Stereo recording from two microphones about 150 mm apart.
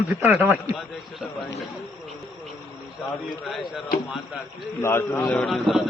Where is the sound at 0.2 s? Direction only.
10° right (ahead or behind).